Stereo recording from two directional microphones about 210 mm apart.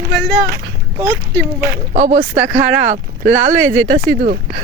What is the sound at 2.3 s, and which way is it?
Speech, 10° right (ahead or behind).